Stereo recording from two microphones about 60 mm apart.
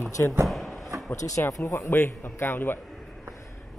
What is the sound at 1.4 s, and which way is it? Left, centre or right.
Speech, left.